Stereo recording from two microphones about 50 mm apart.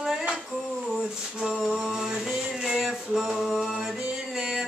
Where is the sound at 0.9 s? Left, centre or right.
Centre.